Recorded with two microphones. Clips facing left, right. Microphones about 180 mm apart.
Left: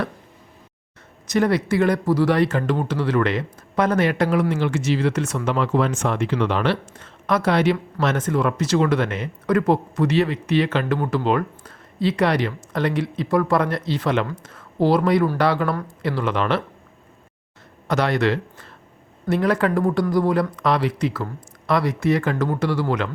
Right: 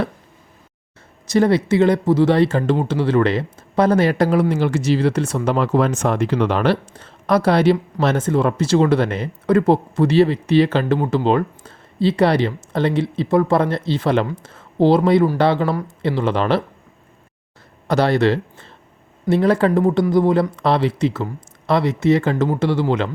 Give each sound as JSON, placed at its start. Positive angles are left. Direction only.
{"t": 1.3, "sound": "speech", "side_deg": -30}
{"t": 17.8, "sound": "speech", "side_deg": -30}